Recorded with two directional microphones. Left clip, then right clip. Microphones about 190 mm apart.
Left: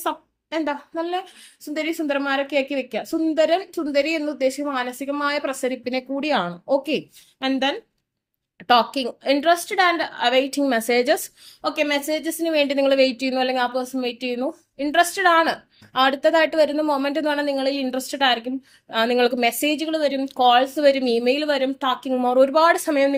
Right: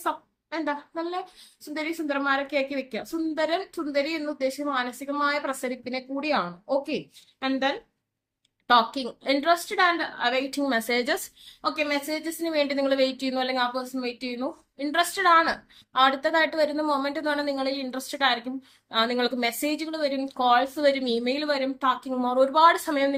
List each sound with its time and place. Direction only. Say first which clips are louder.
0.5 s a woman's voice: left 5 dB; 45° left (ahead or behind)